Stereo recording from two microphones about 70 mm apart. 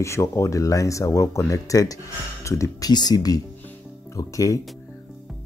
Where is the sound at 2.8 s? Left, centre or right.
Left.